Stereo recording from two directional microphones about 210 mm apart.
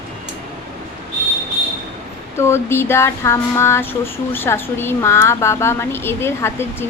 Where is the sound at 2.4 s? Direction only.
10° left (ahead or behind).